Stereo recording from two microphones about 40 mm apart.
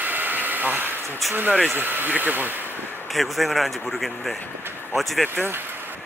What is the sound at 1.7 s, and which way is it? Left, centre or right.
Speech, right.